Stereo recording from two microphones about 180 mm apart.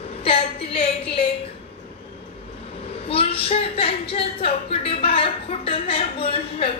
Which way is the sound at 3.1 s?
30° left (ahead or behind).